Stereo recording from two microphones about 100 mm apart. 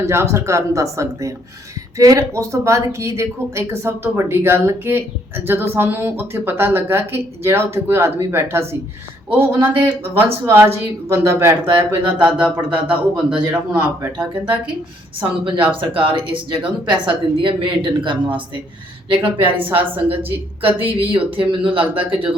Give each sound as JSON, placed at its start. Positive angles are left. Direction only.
{"t": 0.0, "sound": "speech", "side_deg": -30}
{"t": 12.4, "sound": "speech", "side_deg": -10}
{"t": 15.2, "sound": "speech", "side_deg": -55}